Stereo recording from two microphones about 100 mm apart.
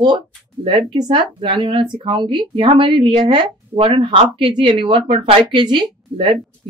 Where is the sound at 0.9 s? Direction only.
50° right (ahead or behind); by 5.4 s 70° right (ahead or behind).